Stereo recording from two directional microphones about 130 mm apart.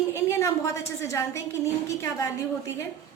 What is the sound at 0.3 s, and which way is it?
A woman's voice, 25° left (ahead or behind).